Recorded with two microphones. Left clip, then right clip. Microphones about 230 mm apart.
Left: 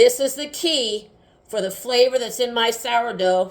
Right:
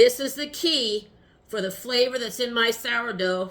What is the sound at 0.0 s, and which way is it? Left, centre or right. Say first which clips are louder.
A woman's voice: left 3 dB; left.